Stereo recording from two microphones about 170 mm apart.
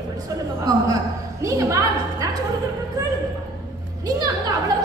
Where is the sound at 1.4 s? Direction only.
20° right (ahead or behind).